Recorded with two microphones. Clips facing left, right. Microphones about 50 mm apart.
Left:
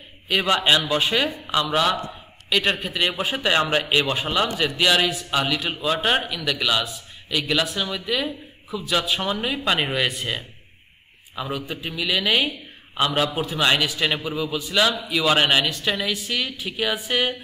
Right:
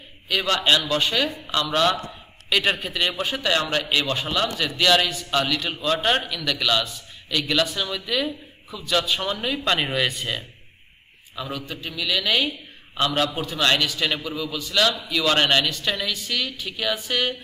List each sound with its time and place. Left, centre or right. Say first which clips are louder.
0.3 s a man's voice: left 1 dB; centre